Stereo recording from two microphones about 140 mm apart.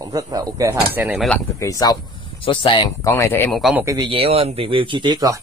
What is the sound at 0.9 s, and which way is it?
Speech, 15° right (ahead or behind).